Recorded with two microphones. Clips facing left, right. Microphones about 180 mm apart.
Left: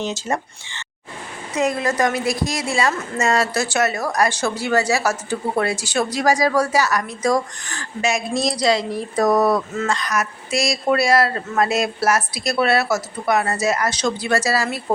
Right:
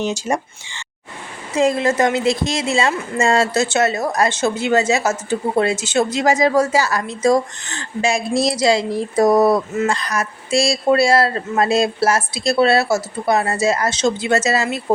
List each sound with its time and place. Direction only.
0.0 s speech: 15° right (ahead or behind)
1.5 s a woman's voice: 25° right (ahead or behind)